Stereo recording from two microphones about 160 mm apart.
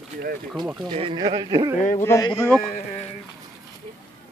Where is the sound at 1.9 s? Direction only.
15° left (ahead or behind).